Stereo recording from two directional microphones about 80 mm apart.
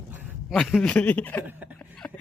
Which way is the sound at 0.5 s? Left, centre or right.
Centre.